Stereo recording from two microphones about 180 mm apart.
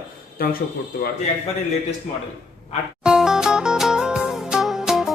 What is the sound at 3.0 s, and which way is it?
Music, 5° right (ahead or behind).